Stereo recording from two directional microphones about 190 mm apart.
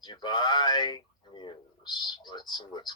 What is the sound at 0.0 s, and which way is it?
Speech, 25° left (ahead or behind).